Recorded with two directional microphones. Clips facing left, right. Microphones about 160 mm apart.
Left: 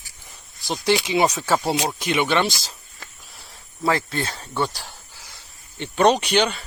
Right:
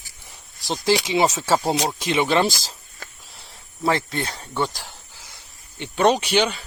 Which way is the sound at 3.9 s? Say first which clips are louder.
Even; 25° right (ahead or behind).